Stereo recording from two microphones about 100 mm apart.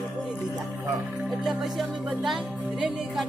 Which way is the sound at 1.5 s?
Centre (ahead or behind).